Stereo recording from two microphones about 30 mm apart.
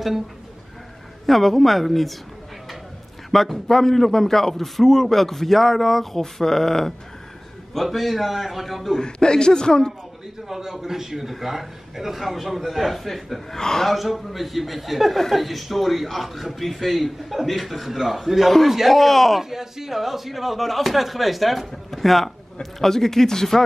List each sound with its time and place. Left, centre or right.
1.2 s speech: centre
3.3 s a man's voice: centre
7.7 s speech: centre
9.0 s a man's voice: left
10.5 s speech: centre
13.6 s a man's voice: centre
13.8 s a man's voice: centre
19.5 s speech: centre